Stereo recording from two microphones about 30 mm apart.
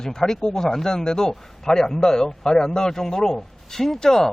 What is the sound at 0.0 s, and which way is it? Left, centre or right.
Speech, centre.